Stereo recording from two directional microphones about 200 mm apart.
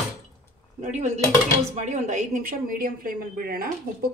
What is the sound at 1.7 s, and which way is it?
Speech, 35° right (ahead or behind).